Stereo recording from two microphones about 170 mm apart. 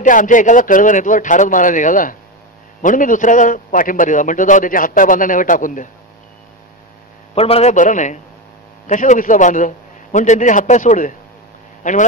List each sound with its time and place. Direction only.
0.0 s a man's voice: 50° left (ahead or behind)
7.3 s a man's voice: 35° left (ahead or behind)